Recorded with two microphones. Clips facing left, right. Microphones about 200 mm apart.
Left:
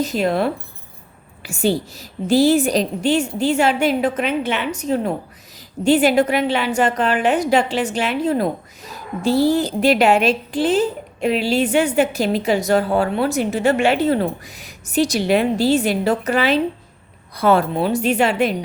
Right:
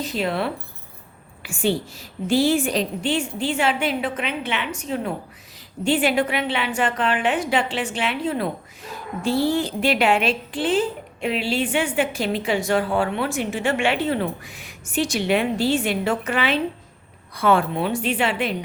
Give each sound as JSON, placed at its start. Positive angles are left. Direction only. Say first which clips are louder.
{"t": 0.0, "sound": "a woman's voice", "louder": "left 5 dB", "side_deg": 45}